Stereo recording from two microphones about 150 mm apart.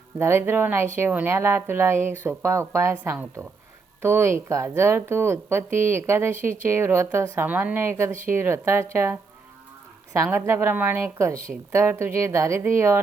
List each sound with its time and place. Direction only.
0.2 s a woman's voice: 15° right (ahead or behind)
10.3 s a woman's voice: 20° right (ahead or behind)